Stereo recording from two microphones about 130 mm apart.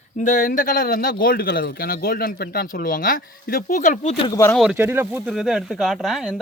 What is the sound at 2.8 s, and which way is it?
Speech, 90° left.